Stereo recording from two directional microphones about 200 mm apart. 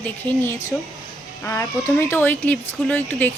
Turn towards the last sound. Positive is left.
turn(degrees=10)  # may be behind; listen again after turning